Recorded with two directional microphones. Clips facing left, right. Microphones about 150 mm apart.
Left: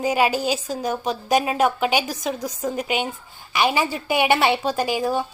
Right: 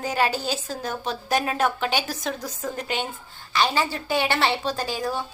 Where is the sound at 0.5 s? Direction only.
Centre (ahead or behind).